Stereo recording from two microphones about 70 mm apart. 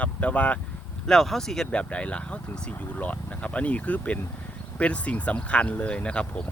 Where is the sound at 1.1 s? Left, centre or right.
Centre.